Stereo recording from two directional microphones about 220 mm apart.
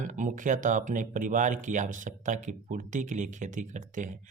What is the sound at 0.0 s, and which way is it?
Speech, 35° right (ahead or behind).